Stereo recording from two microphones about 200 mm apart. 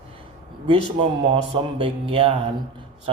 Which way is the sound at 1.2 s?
25° right (ahead or behind).